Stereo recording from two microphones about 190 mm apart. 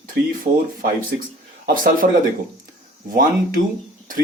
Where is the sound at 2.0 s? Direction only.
45° right (ahead or behind).